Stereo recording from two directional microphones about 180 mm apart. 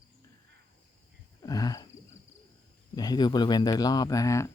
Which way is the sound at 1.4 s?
20° left (ahead or behind).